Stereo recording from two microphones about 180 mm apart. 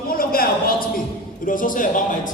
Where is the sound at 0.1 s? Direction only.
55° left (ahead or behind).